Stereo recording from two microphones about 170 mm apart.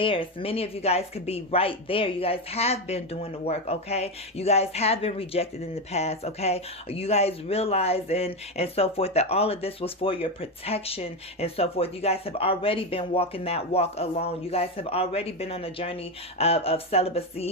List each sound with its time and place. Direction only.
0.0 s speech: 30° left (ahead or behind)